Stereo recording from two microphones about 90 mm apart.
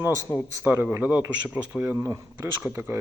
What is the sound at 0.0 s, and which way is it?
A man's voice, 30° right (ahead or behind).